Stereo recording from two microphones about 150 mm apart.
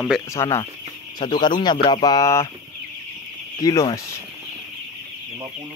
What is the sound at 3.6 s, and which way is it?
Speech, 20° left (ahead or behind).